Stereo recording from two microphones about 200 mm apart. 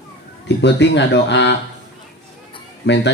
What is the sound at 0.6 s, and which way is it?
Speech, 60° left (ahead or behind).